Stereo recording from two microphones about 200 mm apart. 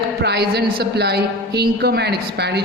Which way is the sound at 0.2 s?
55° right (ahead or behind).